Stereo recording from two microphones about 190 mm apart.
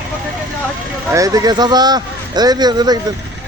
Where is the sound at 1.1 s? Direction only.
20° right (ahead or behind).